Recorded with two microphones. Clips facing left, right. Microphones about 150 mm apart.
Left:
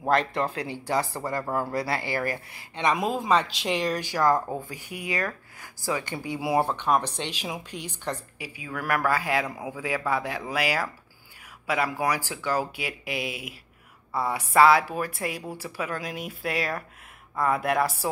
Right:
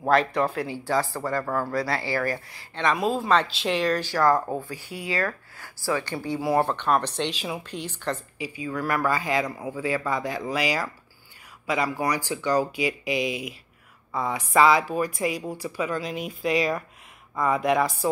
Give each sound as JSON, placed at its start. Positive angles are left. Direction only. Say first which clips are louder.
{"t": 0.6, "sound": "speech", "louder": "right 2 dB", "side_deg": 20}